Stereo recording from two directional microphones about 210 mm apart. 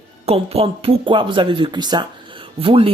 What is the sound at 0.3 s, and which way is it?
Speech, 30° right (ahead or behind).